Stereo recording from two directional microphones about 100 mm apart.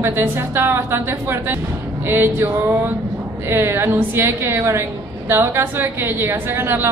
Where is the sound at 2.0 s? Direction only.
25° right (ahead or behind).